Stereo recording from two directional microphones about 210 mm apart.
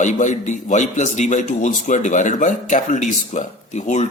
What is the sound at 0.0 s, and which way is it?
A man's voice, 35° left (ahead or behind).